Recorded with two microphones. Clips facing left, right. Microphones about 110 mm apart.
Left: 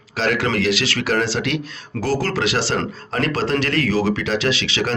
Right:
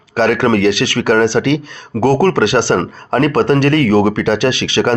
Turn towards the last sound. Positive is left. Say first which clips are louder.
# right 7 dB
turn(degrees=-55)  # may be behind; listen again after turning